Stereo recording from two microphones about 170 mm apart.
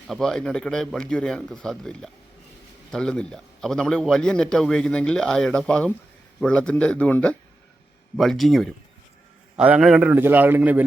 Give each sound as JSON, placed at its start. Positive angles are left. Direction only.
{"t": 0.1, "sound": "a man's voice", "side_deg": 5}